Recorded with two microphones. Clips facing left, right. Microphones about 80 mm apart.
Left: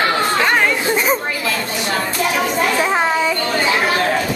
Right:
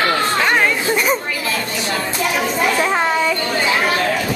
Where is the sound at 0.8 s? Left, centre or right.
Left.